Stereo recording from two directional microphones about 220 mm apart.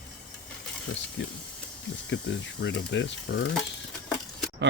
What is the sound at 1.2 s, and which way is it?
Speech, 55° left (ahead or behind).